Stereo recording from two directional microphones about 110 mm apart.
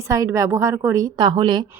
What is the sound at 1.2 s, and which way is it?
Speech, 45° right (ahead or behind).